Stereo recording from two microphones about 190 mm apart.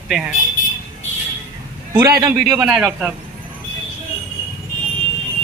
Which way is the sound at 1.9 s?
15° right (ahead or behind).